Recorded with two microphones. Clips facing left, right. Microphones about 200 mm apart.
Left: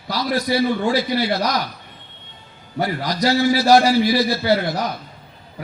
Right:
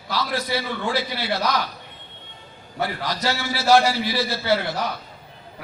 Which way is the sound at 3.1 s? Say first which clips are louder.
Left 9 dB; 40° left (ahead or behind).